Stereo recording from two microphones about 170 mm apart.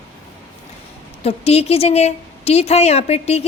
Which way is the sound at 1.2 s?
35° left (ahead or behind).